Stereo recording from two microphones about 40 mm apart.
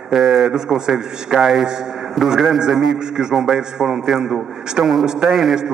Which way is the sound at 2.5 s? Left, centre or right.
Centre.